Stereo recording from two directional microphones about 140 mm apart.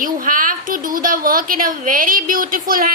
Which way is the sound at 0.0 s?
75° right (ahead or behind).